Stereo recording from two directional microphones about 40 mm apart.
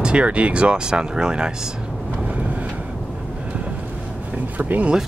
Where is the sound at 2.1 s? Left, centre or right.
Right.